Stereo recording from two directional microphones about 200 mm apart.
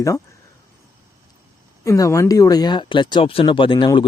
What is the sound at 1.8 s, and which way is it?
Speech, 15° left (ahead or behind).